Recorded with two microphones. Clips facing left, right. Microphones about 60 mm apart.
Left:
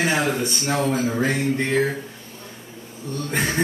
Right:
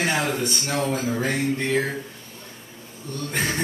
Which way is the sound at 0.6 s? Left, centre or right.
Centre.